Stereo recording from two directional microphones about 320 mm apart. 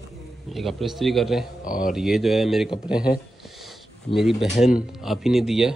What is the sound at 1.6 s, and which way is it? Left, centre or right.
Speech, left.